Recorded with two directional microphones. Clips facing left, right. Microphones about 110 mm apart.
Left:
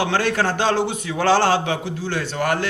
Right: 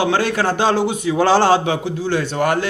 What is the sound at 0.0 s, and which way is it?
A man's voice, 15° right (ahead or behind).